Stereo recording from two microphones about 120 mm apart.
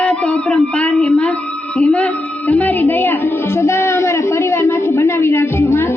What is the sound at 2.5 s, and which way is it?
Music, 15° left (ahead or behind).